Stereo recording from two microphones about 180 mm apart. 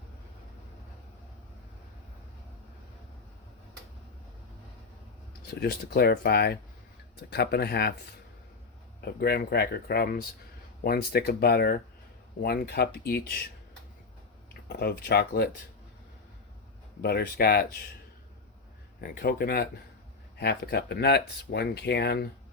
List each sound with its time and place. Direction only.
5.5 s speech: 65° left (ahead or behind)
9.0 s speech: 60° left (ahead or behind)
14.7 s speech: 65° left (ahead or behind)
17.0 s speech: 60° left (ahead or behind)
18.9 s speech: 55° left (ahead or behind)